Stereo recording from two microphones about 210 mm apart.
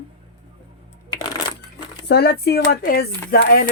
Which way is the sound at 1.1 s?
20° left (ahead or behind).